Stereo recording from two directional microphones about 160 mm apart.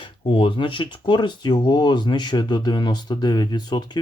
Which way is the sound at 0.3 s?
35° left (ahead or behind).